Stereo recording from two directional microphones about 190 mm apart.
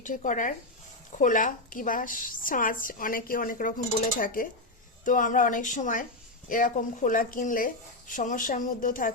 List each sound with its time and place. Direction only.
0.0 s a woman's voice: 40° left (ahead or behind)